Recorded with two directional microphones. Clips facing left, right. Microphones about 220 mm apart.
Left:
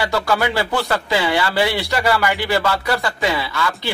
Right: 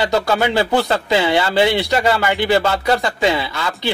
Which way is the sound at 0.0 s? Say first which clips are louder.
Right 2 dB; 20° right (ahead or behind).